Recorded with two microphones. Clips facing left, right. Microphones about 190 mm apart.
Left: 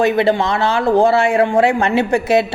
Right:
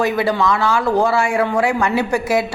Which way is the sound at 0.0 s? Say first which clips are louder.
Left 3 dB; 25° left (ahead or behind).